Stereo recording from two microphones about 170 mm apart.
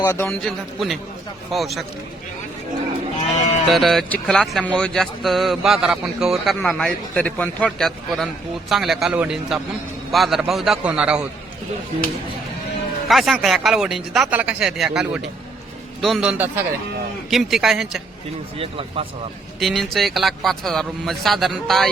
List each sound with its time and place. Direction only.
0.0 s a man's voice: 15° left (ahead or behind)
0.3 s speech: centre (ahead or behind)
3.2 s sheep: 40° left (ahead or behind)
3.7 s speech: centre (ahead or behind)
13.1 s a man's voice: centre (ahead or behind)
18.5 s speech: 35° right (ahead or behind)
19.5 s speech: centre (ahead or behind)